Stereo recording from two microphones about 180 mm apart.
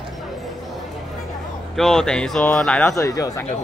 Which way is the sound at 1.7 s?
Centre (ahead or behind).